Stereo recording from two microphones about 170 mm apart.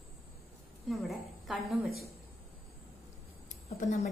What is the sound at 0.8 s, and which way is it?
Speech, centre (ahead or behind).